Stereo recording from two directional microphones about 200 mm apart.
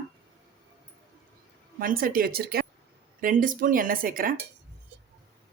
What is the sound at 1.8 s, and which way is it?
Speech, 45° right (ahead or behind).